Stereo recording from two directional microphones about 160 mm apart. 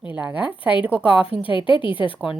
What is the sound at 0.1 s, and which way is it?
A woman's voice, 10° right (ahead or behind).